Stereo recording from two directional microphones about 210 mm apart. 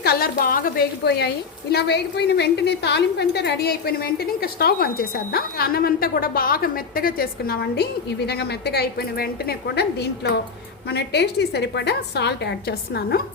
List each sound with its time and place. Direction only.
0.0 s a woman's voice: 45° left (ahead or behind)